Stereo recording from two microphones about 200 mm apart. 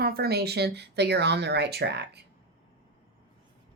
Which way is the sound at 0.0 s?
50° right (ahead or behind).